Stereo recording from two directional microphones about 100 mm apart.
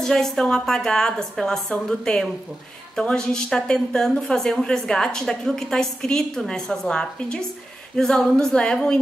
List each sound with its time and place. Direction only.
0.0 s a woman's voice: 5° left (ahead or behind)
1.7 s a capella: 5° left (ahead or behind)
3.0 s a woman's voice: 5° left (ahead or behind)
7.9 s a capella: 5° left (ahead or behind)